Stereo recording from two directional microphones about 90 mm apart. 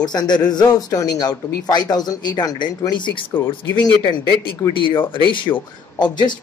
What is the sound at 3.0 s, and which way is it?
Speech, 60° left (ahead or behind).